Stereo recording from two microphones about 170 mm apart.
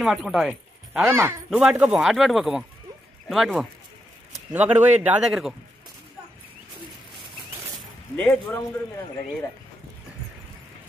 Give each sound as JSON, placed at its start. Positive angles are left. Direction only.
{"t": 0.0, "sound": "speech", "side_deg": 0}
{"t": 1.0, "sound": "a man's voice", "side_deg": -15}
{"t": 1.5, "sound": "a man's voice", "side_deg": -5}
{"t": 8.2, "sound": "a man's voice", "side_deg": 15}